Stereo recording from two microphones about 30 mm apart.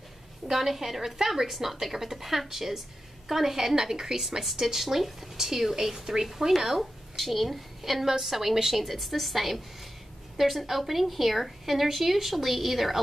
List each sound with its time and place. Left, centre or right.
0.5 s a woman's voice: centre
6.8 s a woman's voice: centre